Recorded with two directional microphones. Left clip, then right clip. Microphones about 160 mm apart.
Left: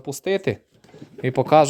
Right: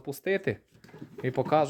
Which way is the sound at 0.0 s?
25° left (ahead or behind).